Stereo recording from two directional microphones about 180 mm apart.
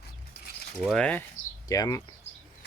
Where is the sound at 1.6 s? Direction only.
20° left (ahead or behind).